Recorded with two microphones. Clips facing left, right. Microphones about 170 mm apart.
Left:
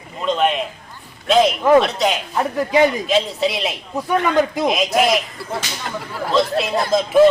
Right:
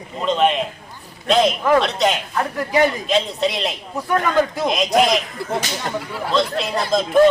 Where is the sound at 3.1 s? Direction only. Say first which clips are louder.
Left 1 dB; centre (ahead or behind).